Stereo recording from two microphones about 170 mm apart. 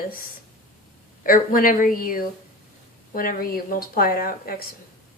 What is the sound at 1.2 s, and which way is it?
A woman's voice, 55° left (ahead or behind).